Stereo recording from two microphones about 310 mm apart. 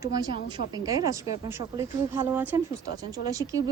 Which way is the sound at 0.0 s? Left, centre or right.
Centre.